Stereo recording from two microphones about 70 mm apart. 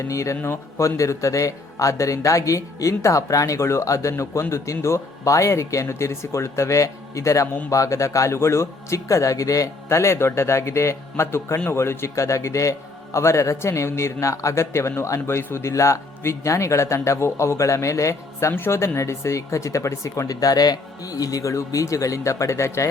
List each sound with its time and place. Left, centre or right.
0.1 s a man's voice: left